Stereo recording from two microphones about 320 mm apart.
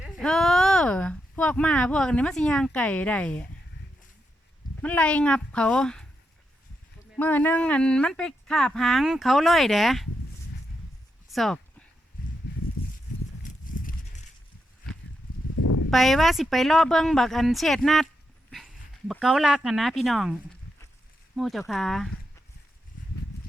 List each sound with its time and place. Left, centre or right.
0.0 s speech: centre
4.8 s speech: centre
7.2 s speech: centre
11.3 s a sound: centre
15.6 s a sound: left
15.9 s speech: centre
21.3 s speech: centre